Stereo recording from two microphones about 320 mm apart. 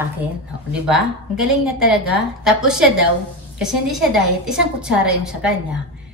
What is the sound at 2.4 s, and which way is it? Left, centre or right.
Speech, centre.